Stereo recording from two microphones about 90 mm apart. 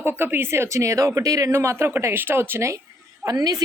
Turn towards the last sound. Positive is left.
turn(degrees=-45)  # may be behind; listen again after turning